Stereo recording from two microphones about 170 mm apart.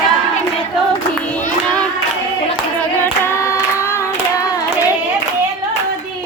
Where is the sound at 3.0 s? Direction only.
15° left (ahead or behind).